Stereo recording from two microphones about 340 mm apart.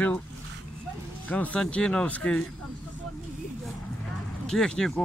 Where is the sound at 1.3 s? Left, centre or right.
Centre.